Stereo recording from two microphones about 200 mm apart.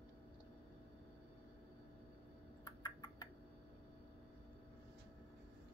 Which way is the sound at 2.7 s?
20° left (ahead or behind).